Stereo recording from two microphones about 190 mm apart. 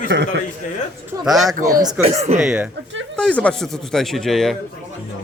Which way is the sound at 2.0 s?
35° right (ahead or behind).